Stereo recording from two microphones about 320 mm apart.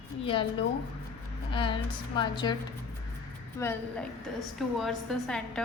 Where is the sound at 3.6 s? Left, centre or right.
Centre.